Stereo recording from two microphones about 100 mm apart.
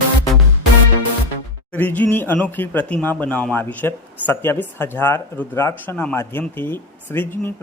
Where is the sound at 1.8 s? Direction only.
15° left (ahead or behind).